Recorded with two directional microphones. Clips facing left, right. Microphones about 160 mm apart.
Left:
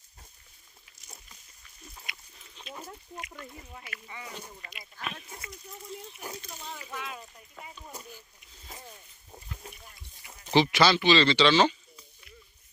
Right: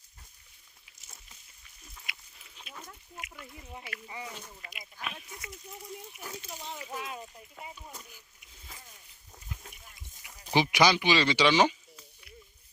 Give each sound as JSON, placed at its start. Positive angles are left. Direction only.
{"t": 2.1, "sound": "livestock", "side_deg": -5}
{"t": 2.7, "sound": "chicken", "side_deg": -10}
{"t": 3.7, "sound": "speech", "side_deg": -25}
{"t": 4.6, "sound": "speech", "side_deg": -10}
{"t": 6.6, "sound": "speech", "side_deg": -20}
{"t": 6.9, "sound": "speech", "side_deg": -35}
{"t": 10.5, "sound": "speech", "side_deg": -15}